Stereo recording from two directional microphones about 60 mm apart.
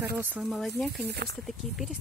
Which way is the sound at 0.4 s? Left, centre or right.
Centre.